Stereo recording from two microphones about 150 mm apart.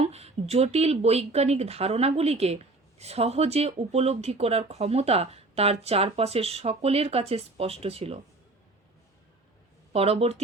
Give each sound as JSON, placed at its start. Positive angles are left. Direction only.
{"t": 0.0, "sound": "speech", "side_deg": -45}
{"t": 9.9, "sound": "speech", "side_deg": -40}